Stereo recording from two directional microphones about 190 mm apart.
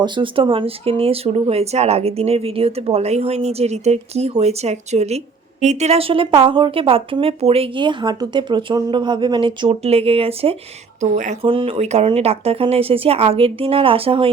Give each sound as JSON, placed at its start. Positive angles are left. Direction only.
{"t": 0.0, "sound": "speech", "side_deg": -25}
{"t": 11.4, "sound": "speech", "side_deg": -30}